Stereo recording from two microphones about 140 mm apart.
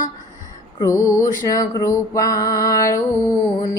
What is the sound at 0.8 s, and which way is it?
Music, 20° left (ahead or behind).